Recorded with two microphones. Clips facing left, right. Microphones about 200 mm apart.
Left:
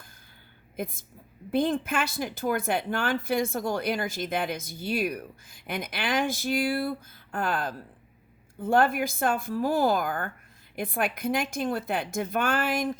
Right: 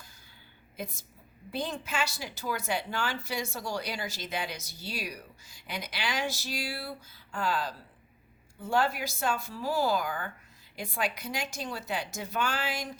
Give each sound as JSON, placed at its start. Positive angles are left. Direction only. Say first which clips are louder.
{"t": 0.8, "sound": "a woman's voice", "louder": "left 6 dB", "side_deg": 55}